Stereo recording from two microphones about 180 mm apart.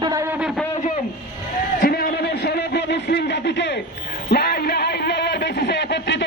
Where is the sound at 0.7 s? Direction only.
40° left (ahead or behind).